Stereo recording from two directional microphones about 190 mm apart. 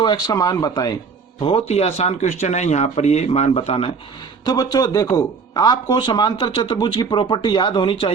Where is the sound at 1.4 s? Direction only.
30° left (ahead or behind).